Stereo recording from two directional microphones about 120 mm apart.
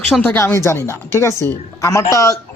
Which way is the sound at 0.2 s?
20° left (ahead or behind).